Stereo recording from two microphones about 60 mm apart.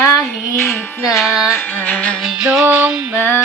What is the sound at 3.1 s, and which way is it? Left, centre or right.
Music, left.